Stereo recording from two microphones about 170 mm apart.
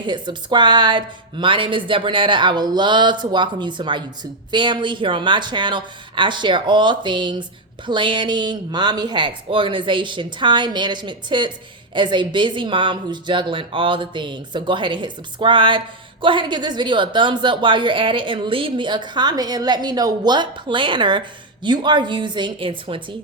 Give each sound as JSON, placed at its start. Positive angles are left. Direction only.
{"t": 0.0, "sound": "a woman's voice", "side_deg": -25}